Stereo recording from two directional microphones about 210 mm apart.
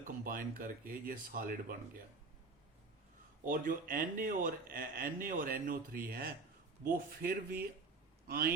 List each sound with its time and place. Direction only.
0.0 s speech: 40° right (ahead or behind)
3.4 s speech: 40° right (ahead or behind)